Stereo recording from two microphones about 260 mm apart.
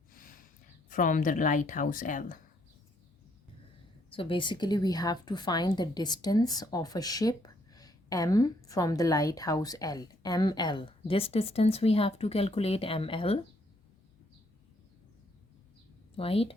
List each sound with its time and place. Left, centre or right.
0.1 s a sound: left
0.9 s speech: left
4.1 s a woman's voice: centre
16.1 s a woman's voice: left